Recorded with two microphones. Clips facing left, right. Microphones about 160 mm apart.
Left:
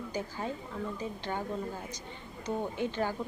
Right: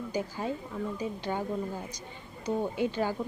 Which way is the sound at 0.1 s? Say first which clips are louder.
Right 4 dB; 15° right (ahead or behind).